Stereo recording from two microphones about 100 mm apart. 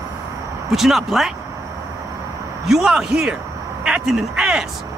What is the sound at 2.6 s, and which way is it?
A man's voice, 5° right (ahead or behind).